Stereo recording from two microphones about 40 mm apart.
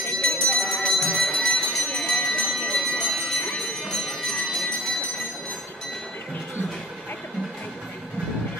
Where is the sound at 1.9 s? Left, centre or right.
Centre.